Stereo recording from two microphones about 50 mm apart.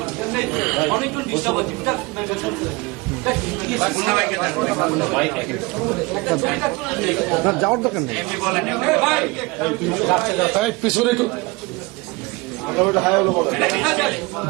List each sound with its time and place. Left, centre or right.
0.0 s a man's voice: centre
12.6 s a man's voice: centre